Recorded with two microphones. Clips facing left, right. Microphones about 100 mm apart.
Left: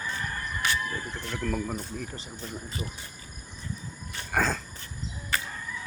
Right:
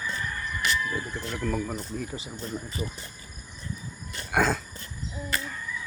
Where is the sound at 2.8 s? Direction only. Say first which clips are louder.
Right 4 dB; 45° right (ahead or behind).